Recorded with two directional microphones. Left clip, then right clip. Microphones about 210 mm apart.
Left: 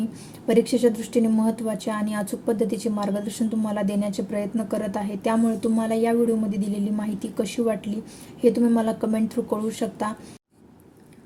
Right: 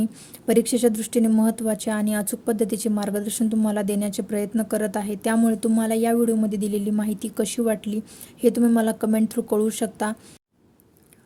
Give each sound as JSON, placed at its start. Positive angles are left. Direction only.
{"t": 0.4, "sound": "speech", "side_deg": -45}